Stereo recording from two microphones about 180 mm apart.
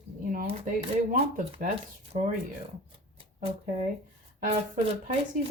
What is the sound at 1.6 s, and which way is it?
Speech, 45° right (ahead or behind).